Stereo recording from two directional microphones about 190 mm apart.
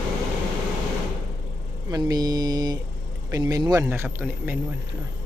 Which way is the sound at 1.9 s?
20° right (ahead or behind).